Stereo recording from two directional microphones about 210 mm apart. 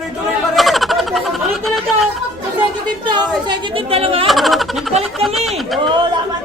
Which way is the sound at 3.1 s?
20° right (ahead or behind).